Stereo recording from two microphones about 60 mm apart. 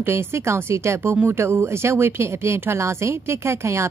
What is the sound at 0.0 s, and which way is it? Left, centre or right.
A woman's voice, right.